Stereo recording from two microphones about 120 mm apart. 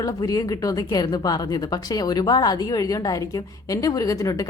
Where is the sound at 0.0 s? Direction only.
30° left (ahead or behind).